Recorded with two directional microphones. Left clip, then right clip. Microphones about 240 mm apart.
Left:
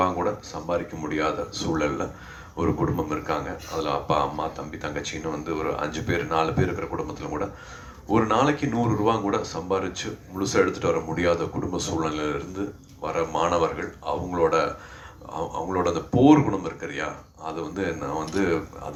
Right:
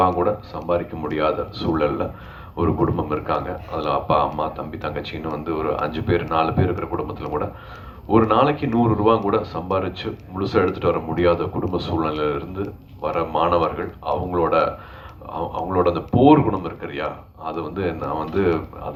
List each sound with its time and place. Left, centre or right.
0.0 s speech: left